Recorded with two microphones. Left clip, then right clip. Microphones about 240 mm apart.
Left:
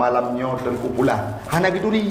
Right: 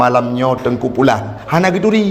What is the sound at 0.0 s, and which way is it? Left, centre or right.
A man's voice, right.